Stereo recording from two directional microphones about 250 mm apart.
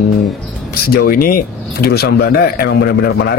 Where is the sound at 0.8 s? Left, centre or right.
Left.